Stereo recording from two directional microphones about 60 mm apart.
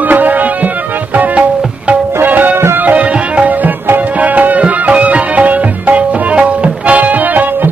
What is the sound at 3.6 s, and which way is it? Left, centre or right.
Music, right.